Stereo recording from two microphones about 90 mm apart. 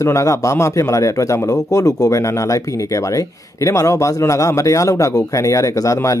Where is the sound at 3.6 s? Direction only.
35° left (ahead or behind).